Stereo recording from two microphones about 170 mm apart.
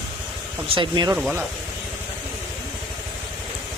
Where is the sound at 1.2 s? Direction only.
Centre (ahead or behind).